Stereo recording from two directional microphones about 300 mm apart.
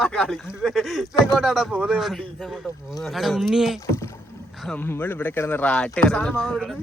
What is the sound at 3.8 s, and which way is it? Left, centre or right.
Speech, centre.